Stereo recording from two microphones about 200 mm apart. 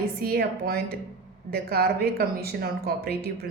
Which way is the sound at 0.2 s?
50° right (ahead or behind).